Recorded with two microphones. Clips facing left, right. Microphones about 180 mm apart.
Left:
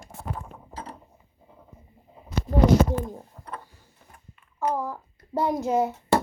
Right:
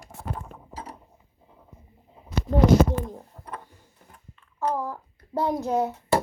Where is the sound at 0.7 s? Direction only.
10° right (ahead or behind).